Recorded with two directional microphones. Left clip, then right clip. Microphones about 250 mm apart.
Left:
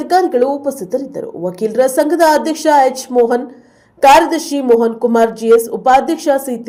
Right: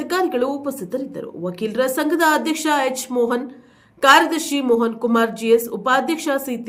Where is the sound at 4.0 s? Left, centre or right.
Centre.